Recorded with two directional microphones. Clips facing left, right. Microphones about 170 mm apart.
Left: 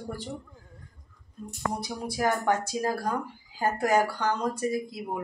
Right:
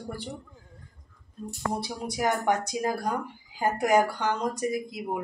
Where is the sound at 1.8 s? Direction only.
20° right (ahead or behind).